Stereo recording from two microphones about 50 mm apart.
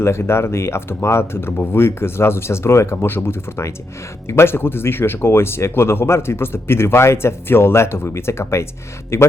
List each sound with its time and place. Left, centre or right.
0.0 s speech: left